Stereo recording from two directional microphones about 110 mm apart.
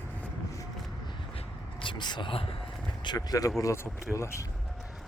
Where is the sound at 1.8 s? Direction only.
45° left (ahead or behind).